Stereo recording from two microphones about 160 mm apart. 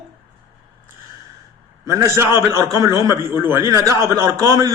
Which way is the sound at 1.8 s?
20° right (ahead or behind).